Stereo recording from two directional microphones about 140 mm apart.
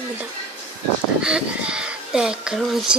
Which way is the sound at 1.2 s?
5° right (ahead or behind).